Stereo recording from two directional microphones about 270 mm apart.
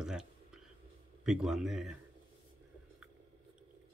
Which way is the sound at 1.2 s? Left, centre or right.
Centre.